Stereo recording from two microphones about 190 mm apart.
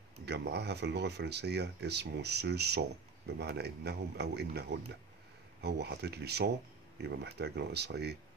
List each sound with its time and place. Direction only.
0.2 s speech: 60° right (ahead or behind)